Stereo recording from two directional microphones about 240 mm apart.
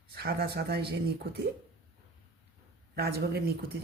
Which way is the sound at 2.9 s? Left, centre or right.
Right.